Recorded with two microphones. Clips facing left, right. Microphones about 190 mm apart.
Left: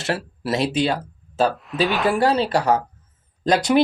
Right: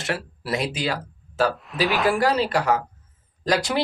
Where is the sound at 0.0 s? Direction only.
25° left (ahead or behind).